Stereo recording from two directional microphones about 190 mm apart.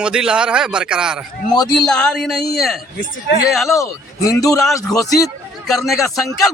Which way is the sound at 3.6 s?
15° left (ahead or behind).